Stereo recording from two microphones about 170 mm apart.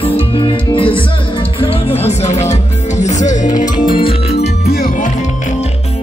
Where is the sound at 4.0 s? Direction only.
35° left (ahead or behind).